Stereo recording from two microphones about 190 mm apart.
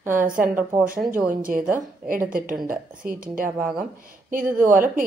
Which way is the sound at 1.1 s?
45° right (ahead or behind).